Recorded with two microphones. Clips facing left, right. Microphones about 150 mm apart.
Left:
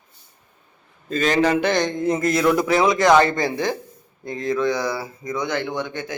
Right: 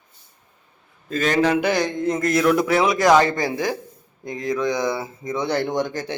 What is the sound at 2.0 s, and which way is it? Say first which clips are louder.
A man's voice: even; 5° left (ahead or behind).